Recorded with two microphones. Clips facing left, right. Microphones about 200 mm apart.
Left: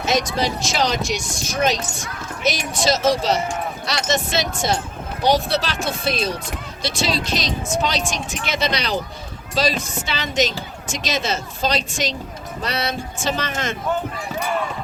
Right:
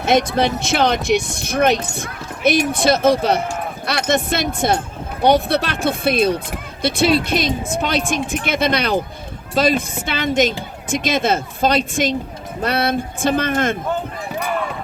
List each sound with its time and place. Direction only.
0.0 s speech: 55° right (ahead or behind)